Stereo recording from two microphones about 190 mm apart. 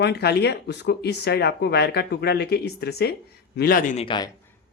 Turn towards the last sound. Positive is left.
turn(degrees=25)  # may be behind; listen again after turning